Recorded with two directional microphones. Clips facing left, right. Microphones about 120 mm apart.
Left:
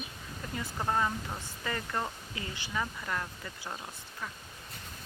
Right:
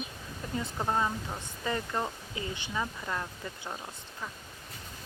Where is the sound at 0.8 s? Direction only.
15° right (ahead or behind).